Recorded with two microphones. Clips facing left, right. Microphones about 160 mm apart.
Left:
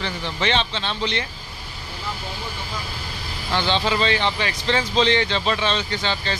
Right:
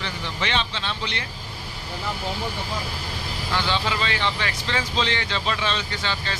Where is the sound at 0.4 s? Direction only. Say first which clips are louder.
Left 4 dB; 30° left (ahead or behind).